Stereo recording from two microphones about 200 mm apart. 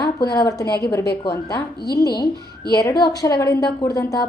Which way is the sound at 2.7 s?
20° left (ahead or behind).